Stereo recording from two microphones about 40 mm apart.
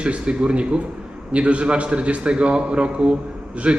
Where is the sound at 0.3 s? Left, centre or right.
Right.